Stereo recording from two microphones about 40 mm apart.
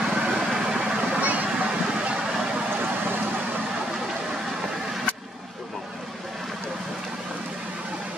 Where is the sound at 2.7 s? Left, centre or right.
Right.